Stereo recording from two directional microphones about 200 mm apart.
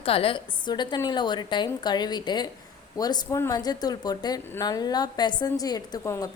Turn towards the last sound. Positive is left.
turn(degrees=15)  # may be behind; listen again after turning